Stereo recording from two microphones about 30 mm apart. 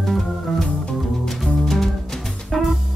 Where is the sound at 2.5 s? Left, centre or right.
Centre.